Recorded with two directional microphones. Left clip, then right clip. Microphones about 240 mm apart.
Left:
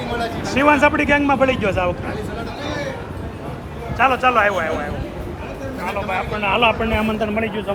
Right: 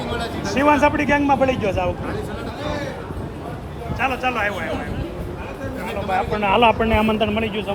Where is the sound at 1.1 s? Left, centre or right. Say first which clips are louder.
Left 1 dB; centre.